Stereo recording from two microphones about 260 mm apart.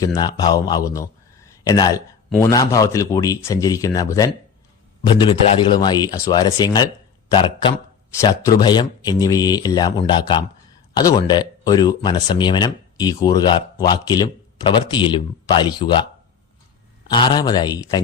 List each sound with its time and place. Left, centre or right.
0.0 s speech: centre
1.5 s a sound: centre
2.4 s speech: centre
17.1 s speech: centre